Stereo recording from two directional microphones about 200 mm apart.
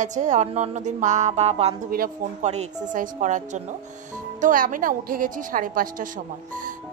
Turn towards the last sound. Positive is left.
turn(degrees=-45)  # may be behind; listen again after turning